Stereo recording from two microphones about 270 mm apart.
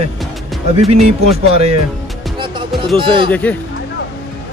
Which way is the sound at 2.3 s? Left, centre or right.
Centre.